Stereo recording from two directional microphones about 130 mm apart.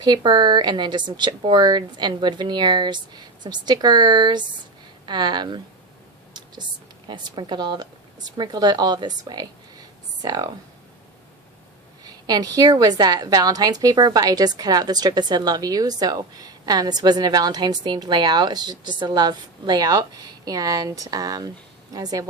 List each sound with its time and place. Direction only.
0.0 s a woman's voice: 35° right (ahead or behind)
7.1 s a woman's voice: 35° right (ahead or behind)
12.0 s a woman's voice: 30° right (ahead or behind)